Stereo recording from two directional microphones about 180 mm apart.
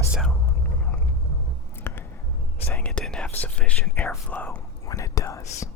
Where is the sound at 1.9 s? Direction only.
10° left (ahead or behind).